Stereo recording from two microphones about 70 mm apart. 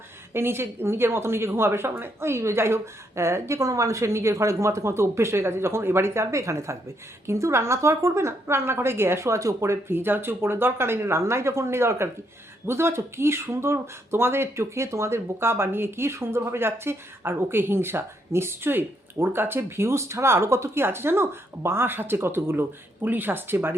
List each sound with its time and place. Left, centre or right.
0.3 s speech: right